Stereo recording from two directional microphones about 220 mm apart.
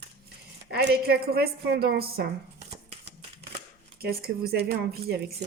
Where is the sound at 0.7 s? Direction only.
45° right (ahead or behind).